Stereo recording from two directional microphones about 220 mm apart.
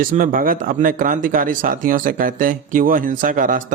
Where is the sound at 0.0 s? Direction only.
40° right (ahead or behind).